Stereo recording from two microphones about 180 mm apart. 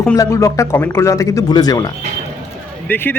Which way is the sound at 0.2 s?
15° left (ahead or behind).